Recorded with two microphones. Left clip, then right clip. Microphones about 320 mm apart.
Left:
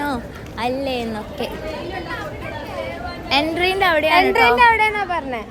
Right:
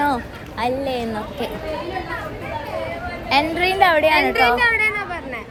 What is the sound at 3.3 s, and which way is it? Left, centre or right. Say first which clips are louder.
Speech: even; centre.